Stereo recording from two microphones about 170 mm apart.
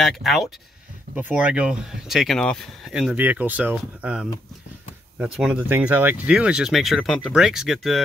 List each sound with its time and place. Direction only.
0.0 s speech: centre (ahead or behind)